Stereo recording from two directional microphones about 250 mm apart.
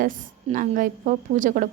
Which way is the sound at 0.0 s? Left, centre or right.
Right.